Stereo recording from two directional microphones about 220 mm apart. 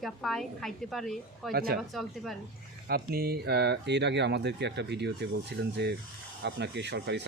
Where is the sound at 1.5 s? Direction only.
45° right (ahead or behind).